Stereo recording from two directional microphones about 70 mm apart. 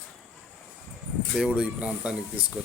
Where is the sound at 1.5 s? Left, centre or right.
Centre.